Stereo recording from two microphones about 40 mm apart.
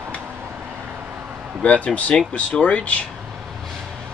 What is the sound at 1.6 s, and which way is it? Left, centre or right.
Speech, left.